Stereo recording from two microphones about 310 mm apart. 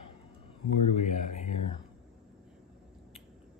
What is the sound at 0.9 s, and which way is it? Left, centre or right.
Speech, left.